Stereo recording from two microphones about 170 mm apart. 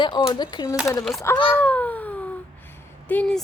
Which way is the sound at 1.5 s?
10° left (ahead or behind).